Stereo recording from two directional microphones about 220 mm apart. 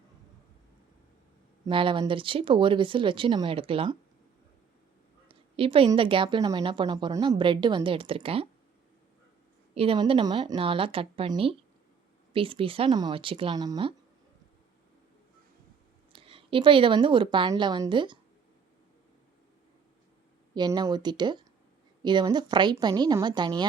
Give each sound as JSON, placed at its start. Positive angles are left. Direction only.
{"t": 1.6, "sound": "a woman's voice", "side_deg": -20}
{"t": 5.3, "sound": "a woman's voice", "side_deg": -25}
{"t": 9.7, "sound": "a woman's voice", "side_deg": -25}
{"t": 16.1, "sound": "a woman's voice", "side_deg": -25}
{"t": 20.5, "sound": "a woman's voice", "side_deg": -20}